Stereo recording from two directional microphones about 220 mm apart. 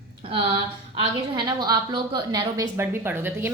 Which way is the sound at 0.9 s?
20° right (ahead or behind).